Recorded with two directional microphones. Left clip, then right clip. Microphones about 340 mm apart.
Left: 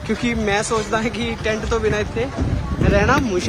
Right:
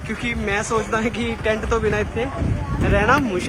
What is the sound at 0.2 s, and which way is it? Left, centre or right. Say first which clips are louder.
Speech: left 1 dB; centre.